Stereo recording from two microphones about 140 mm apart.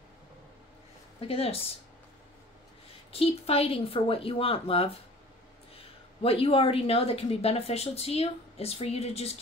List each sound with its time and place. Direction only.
1.2 s speech: 45° left (ahead or behind)
3.1 s speech: 45° left (ahead or behind)